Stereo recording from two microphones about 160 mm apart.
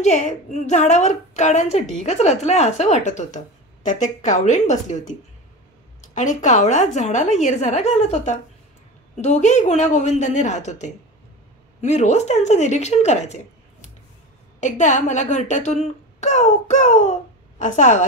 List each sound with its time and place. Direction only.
0.0 s speech: 50° left (ahead or behind)